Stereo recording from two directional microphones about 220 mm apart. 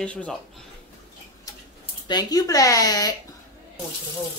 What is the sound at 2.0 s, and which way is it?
Speech, 20° left (ahead or behind).